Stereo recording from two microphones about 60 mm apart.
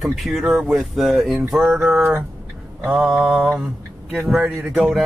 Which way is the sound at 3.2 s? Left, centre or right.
Centre.